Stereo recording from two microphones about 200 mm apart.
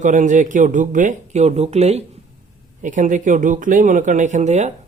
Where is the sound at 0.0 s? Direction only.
40° right (ahead or behind).